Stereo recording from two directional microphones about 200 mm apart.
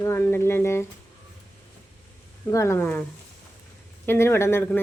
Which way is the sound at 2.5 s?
15° left (ahead or behind).